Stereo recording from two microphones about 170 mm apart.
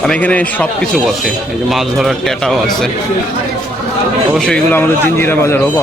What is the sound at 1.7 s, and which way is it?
Speech, centre (ahead or behind).